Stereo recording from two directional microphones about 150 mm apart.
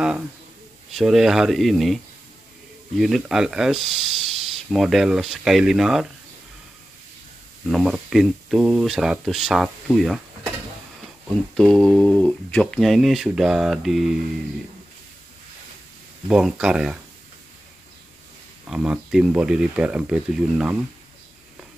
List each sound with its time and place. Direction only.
0.9 s speech: centre (ahead or behind)
3.0 s speech: centre (ahead or behind)
7.7 s speech: 5° right (ahead or behind)
11.5 s speech: 5° left (ahead or behind)
16.3 s speech: 5° right (ahead or behind)
18.7 s speech: 5° right (ahead or behind)